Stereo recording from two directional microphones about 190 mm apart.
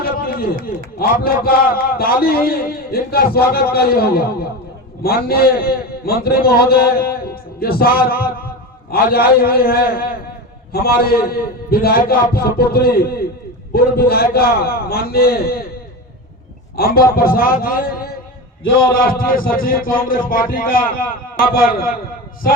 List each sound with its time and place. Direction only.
0.0 s a sound: 55° left (ahead or behind)
0.9 s a man's voice: 50° left (ahead or behind)
16.7 s a man's voice: 50° left (ahead or behind)